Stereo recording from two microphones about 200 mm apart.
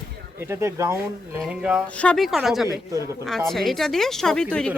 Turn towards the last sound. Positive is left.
turn(degrees=5)  # may be behind; listen again after turning